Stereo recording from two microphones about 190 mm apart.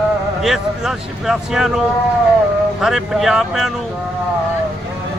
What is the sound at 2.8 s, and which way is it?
Speech, centre (ahead or behind).